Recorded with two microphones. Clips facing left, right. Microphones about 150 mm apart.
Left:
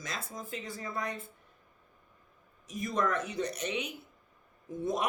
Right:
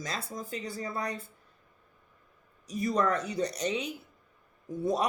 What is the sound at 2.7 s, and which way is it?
Speech, 35° right (ahead or behind).